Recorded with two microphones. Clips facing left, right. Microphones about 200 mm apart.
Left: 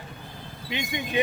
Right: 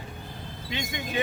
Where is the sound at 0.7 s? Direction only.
15° left (ahead or behind).